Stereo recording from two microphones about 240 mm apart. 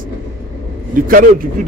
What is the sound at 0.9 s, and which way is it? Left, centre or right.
Speech, right.